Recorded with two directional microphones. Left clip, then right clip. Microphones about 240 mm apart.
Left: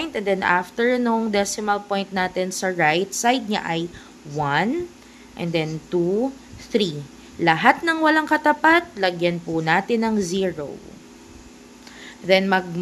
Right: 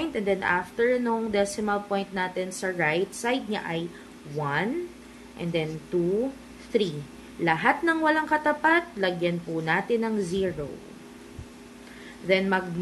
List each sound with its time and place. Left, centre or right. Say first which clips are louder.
0.0 s a woman's voice: left 4 dB; left
12.3 s a woman's voice: left 6 dB; left